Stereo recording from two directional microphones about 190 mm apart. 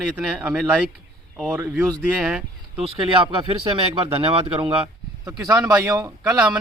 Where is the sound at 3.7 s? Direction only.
30° right (ahead or behind).